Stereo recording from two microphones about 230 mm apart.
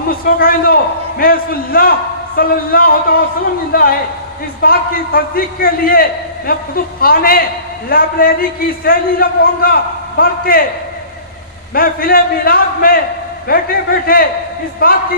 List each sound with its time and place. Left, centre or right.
0.1 s a man's voice: left
11.7 s a man's voice: left